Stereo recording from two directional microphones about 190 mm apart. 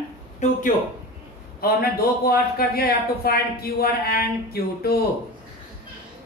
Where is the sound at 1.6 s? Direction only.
50° left (ahead or behind).